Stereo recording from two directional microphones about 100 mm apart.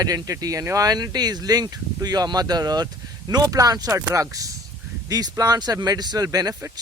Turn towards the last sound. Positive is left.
turn(degrees=-35)  # may be behind; listen again after turning